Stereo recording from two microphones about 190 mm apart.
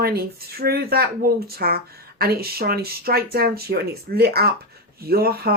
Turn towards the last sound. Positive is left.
turn(degrees=-55)  # may be behind; listen again after turning